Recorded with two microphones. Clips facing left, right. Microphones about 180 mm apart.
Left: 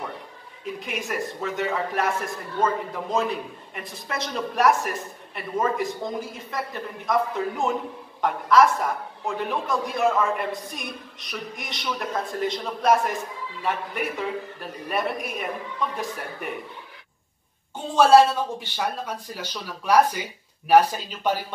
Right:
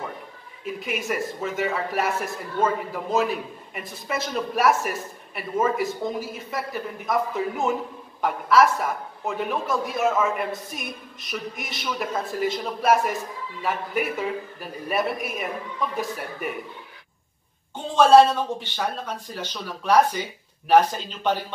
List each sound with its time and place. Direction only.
0.7 s a woman's voice: 5° right (ahead or behind)
17.9 s speech: 10° left (ahead or behind)